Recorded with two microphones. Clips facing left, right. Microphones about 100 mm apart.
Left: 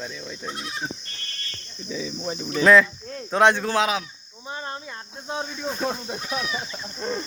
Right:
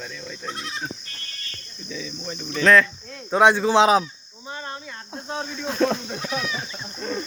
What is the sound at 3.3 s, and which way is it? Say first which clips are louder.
Speech: right 2 dB; 10° right (ahead or behind).